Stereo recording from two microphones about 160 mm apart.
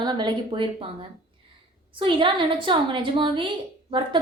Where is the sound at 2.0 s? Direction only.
30° right (ahead or behind).